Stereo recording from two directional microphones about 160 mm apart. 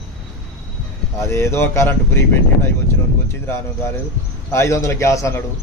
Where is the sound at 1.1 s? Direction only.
15° left (ahead or behind).